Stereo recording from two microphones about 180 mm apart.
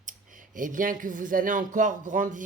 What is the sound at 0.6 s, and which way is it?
Speech, 50° right (ahead or behind).